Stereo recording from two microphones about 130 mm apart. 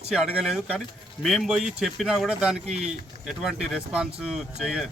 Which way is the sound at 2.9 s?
5° right (ahead or behind).